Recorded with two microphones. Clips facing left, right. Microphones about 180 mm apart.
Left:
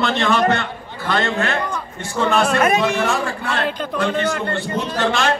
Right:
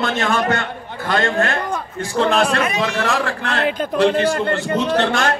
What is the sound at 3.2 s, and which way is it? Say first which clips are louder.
Speech: right 1 dB; 75° right (ahead or behind).